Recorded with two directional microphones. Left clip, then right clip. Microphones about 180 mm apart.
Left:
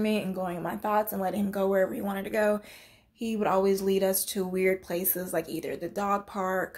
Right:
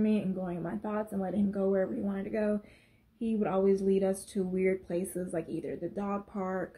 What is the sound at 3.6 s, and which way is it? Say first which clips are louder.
Speech: left 2 dB; 45° left (ahead or behind).